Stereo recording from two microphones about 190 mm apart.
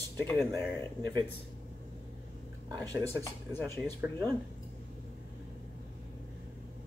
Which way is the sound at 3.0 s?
10° left (ahead or behind).